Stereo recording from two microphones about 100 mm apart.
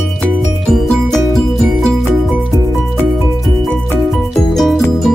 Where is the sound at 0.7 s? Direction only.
5° left (ahead or behind).